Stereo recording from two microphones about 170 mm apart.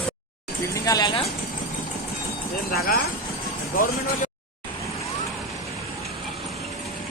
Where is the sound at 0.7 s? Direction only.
20° left (ahead or behind).